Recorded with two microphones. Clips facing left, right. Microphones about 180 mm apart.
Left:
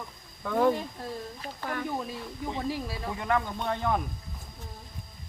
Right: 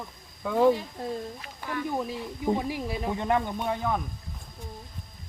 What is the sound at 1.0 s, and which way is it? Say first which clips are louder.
Speech: right 5 dB; 25° right (ahead or behind).